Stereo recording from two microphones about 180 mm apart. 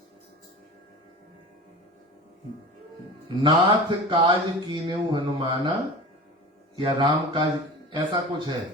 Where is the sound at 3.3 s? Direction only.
25° right (ahead or behind).